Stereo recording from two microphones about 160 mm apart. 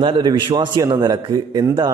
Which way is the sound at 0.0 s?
30° right (ahead or behind).